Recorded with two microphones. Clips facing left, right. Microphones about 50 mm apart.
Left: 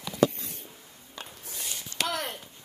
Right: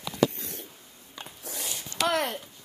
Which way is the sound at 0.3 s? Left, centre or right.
Right.